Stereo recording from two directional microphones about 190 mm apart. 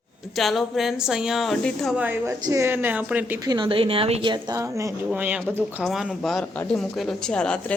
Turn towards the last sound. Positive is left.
turn(degrees=5)  # may be behind; listen again after turning